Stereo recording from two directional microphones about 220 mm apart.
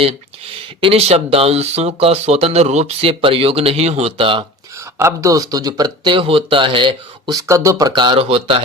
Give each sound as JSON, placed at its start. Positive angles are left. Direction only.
{"t": 0.8, "sound": "speech", "side_deg": -25}
{"t": 4.9, "sound": "speech", "side_deg": -15}